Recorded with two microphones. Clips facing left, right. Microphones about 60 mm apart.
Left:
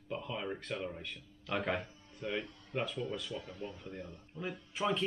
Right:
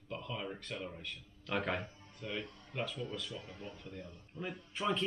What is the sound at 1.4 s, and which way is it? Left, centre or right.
Speech, centre.